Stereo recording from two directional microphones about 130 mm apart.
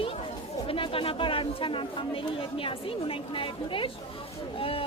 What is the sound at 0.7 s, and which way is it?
Speech, 45° left (ahead or behind).